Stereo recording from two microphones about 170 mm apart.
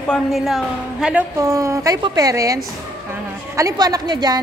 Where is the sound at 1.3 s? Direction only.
15° right (ahead or behind).